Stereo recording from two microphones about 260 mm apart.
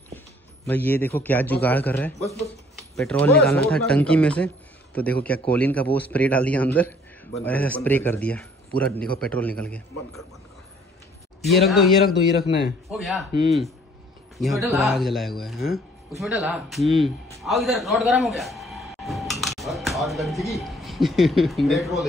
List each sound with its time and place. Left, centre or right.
0.7 s a man's voice: centre
11.6 s speech: centre
14.7 s speech: centre
17.4 s music: centre
20.5 s speech: centre